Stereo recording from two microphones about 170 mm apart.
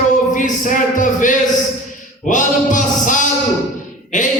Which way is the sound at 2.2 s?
50° left (ahead or behind).